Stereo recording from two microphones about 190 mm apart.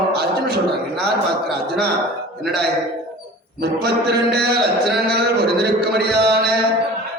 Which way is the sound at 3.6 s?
55° right (ahead or behind).